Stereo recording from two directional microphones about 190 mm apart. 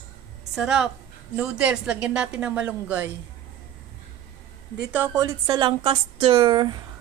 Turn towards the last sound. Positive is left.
turn(degrees=-25)  # may be behind; listen again after turning